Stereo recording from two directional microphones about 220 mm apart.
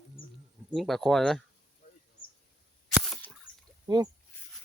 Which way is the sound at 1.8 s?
40° left (ahead or behind).